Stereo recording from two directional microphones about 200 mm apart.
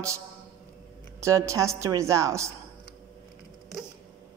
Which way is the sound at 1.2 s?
15° right (ahead or behind).